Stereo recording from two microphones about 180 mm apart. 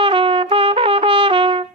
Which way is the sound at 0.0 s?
30° right (ahead or behind).